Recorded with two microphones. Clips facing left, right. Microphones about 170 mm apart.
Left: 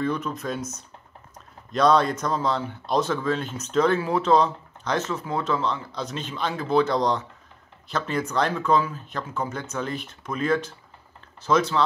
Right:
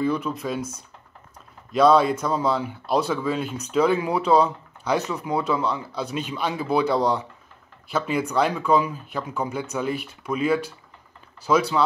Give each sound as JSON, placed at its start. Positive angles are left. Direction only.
{"t": 0.0, "sound": "speech", "side_deg": -10}
{"t": 0.6, "sound": "speech", "side_deg": -30}
{"t": 1.7, "sound": "speech", "side_deg": -5}